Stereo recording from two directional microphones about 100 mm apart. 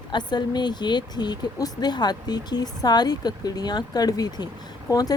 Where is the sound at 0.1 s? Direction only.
45° left (ahead or behind).